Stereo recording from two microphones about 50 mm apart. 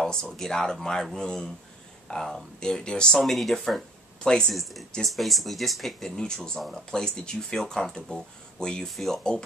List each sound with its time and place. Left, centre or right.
0.0 s a sound: centre
0.4 s speech: centre
3.2 s speech: centre
4.2 s speech: centre
4.5 s speech: centre
8.8 s speech: centre